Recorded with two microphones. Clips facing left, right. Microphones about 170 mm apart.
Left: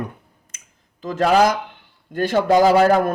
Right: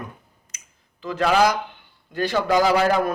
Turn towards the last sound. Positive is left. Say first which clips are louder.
# left 5 dB
turn(degrees=40)  # may be behind; listen again after turning